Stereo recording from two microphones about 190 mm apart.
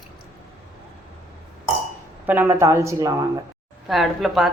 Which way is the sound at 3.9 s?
Centre (ahead or behind).